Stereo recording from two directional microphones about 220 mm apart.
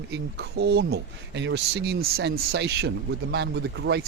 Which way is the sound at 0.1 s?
50° right (ahead or behind).